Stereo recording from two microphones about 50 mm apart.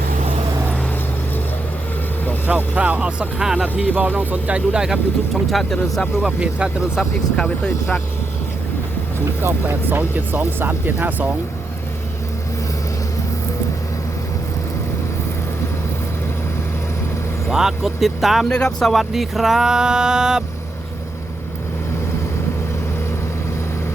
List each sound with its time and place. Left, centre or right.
2.7 s speech: right
3.8 s speech: right
5.3 s speech: centre
6.2 s speech: right
7.3 s speech: left
9.4 s speech: right
17.5 s speech: centre
18.4 s speech: centre
18.9 s a sound: centre